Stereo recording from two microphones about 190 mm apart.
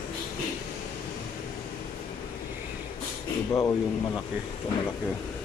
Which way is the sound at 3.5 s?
15° left (ahead or behind).